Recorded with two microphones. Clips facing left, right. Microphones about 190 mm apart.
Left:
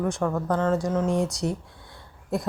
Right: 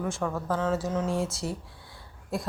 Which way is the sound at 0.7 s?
10° left (ahead or behind).